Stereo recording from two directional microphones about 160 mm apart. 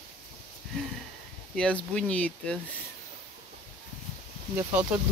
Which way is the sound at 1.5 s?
5° left (ahead or behind).